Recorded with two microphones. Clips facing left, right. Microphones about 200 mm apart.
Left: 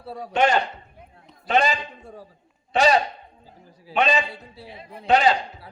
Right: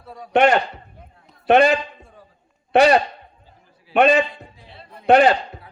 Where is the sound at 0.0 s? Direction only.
30° left (ahead or behind).